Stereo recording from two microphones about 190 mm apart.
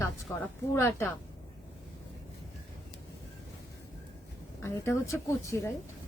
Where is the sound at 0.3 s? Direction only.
15° left (ahead or behind).